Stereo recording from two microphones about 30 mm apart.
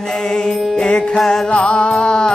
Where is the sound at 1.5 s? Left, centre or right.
Left.